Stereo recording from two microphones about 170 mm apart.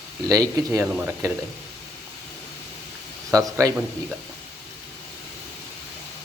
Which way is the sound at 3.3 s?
20° right (ahead or behind).